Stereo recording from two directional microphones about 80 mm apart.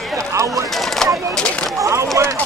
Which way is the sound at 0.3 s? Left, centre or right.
Right.